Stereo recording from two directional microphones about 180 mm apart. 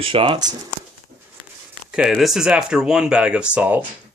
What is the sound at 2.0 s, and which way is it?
Speech, centre (ahead or behind).